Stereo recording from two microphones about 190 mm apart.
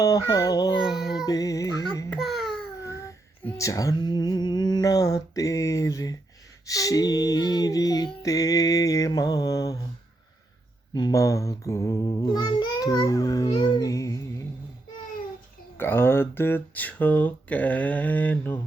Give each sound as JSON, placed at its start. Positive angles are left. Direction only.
{"t": 0.0, "sound": "female singing", "side_deg": 20}
{"t": 0.9, "sound": "child singing", "side_deg": 0}
{"t": 1.2, "sound": "music", "side_deg": 20}
{"t": 2.0, "sound": "a sound", "side_deg": 0}
{"t": 2.8, "sound": "female singing", "side_deg": 15}
{"t": 10.9, "sound": "a sound", "side_deg": 20}
{"t": 15.8, "sound": "speech", "side_deg": 10}